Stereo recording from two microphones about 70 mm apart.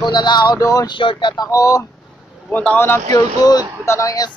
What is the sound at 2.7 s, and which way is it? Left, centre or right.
Speech, left.